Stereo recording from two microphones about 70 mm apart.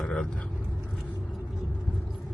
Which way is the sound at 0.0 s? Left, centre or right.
Centre.